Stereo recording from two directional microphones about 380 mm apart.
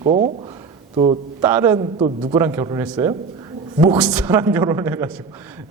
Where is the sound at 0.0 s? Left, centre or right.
Centre.